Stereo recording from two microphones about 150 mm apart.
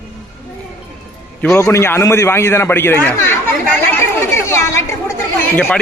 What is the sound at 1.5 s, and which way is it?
A man's voice, 20° left (ahead or behind).